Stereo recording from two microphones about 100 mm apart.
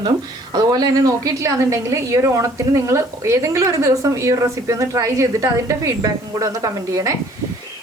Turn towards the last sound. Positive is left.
turn(degrees=-35)  # may be behind; listen again after turning